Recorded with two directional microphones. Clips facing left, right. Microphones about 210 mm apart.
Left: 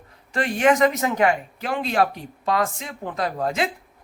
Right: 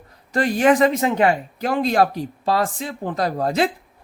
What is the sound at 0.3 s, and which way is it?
Speech, 35° right (ahead or behind).